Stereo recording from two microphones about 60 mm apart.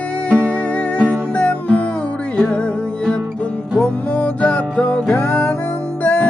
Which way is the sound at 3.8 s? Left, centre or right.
Left.